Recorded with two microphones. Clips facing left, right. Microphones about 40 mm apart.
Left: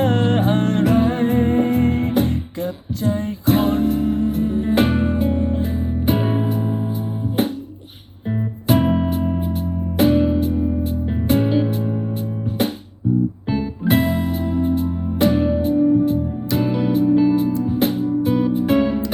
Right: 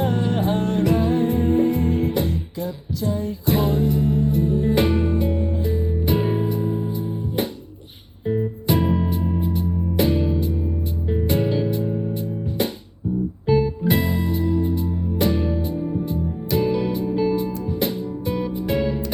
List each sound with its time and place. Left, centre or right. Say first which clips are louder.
0.0 s music: left 4 dB; left
3.5 s music: left 3 dB; left
8.3 s music: left 2 dB; centre
13.5 s music: right 2 dB; left
14.8 s music: left 4 dB; centre